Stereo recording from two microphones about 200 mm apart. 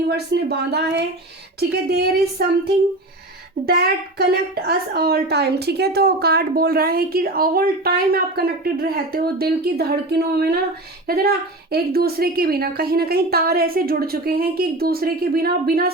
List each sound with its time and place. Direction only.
0.1 s a woman's voice: 55° right (ahead or behind)
3.7 s a woman's voice: 50° right (ahead or behind)